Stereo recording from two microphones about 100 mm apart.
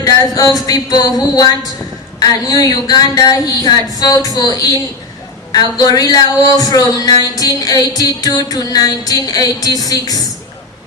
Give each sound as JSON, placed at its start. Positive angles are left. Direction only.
{"t": 0.0, "sound": "a man's voice", "side_deg": 35}